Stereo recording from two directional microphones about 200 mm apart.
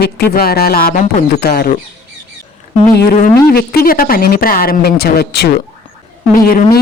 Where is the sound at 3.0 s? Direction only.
50° left (ahead or behind).